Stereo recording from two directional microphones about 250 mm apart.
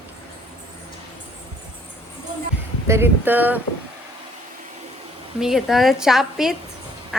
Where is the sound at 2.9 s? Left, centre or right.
Centre.